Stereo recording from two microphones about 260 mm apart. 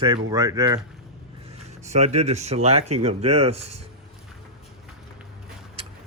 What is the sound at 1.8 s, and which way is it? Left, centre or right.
A man's voice, right.